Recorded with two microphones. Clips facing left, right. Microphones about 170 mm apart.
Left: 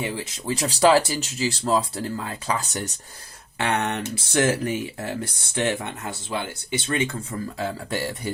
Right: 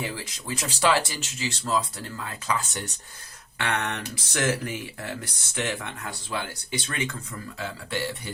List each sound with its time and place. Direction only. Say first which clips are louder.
0.4 s speech: left 6 dB; 35° left (ahead or behind)
3.6 s speech: left 4 dB; 30° left (ahead or behind)
7.6 s speech: left 2 dB; 40° left (ahead or behind)